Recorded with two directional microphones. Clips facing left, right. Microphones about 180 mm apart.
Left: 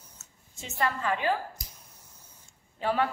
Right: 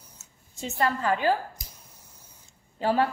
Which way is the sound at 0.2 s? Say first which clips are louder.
Right 9 dB; 35° right (ahead or behind).